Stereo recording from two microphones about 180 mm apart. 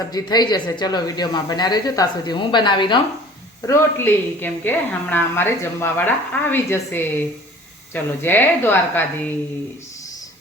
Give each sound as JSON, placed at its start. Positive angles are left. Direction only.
{"t": 0.1, "sound": "speech", "side_deg": 20}
{"t": 3.7, "sound": "a woman's voice", "side_deg": 15}